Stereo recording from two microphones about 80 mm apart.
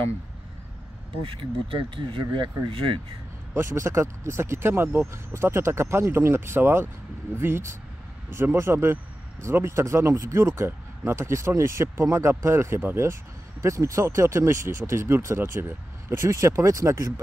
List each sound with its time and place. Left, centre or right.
1.2 s speech: right
3.5 s speech: right